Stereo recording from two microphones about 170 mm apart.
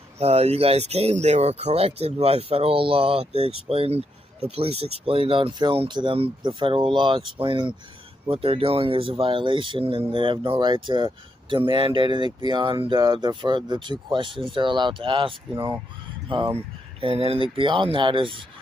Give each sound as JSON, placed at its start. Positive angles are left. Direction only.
{"t": 0.2, "sound": "speech", "side_deg": -40}